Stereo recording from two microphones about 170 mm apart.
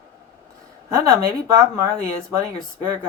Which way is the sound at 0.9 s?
15° right (ahead or behind).